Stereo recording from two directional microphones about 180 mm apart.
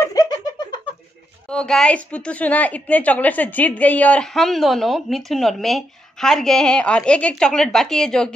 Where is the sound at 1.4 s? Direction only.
5° left (ahead or behind).